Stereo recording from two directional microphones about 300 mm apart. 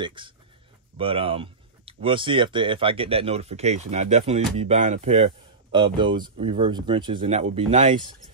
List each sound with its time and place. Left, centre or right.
0.0 s speech: centre